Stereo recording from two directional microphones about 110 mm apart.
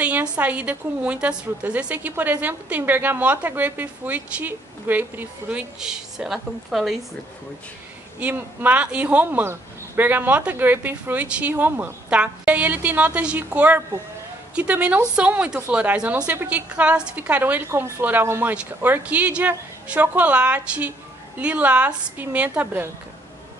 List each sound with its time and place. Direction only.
0.0 s speech: 15° right (ahead or behind)
5.8 s a woman's voice: 5° right (ahead or behind)
8.2 s speech: 15° right (ahead or behind)